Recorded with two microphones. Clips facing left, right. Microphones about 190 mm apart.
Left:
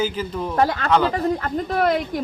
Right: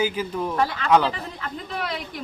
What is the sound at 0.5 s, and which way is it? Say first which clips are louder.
Speech: left 2 dB; 45° left (ahead or behind).